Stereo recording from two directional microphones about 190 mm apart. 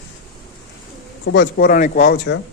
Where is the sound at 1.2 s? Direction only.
70° left (ahead or behind).